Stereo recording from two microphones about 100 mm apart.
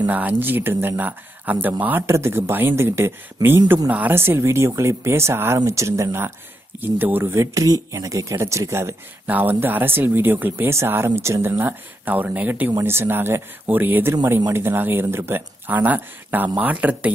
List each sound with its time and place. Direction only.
0.0 s speech: 15° right (ahead or behind)
7.5 s speech: 35° right (ahead or behind); by 14.1 s 20° right (ahead or behind)
14.1 s speech: 30° right (ahead or behind); by 17.1 s 15° right (ahead or behind)